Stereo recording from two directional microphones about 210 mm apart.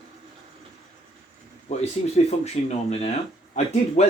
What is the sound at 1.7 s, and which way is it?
Speech, 30° left (ahead or behind).